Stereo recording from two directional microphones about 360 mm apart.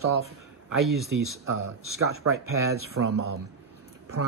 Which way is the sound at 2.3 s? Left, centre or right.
Right.